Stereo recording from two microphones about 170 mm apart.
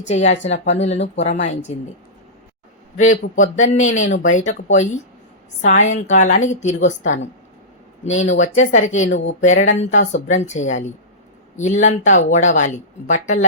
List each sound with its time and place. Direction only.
0.1 s speech: 40° left (ahead or behind)
3.0 s speech: 45° left (ahead or behind)
8.7 s speech: 45° left (ahead or behind)
9.0 s speech: 90° left
9.4 s speech: 45° left (ahead or behind)